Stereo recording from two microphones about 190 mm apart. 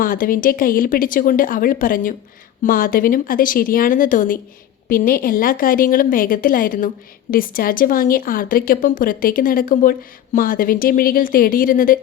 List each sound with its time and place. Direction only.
0.0 s a woman's voice: 50° left (ahead or behind)